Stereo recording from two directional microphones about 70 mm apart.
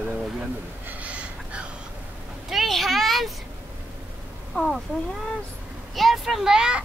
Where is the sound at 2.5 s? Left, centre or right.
Centre.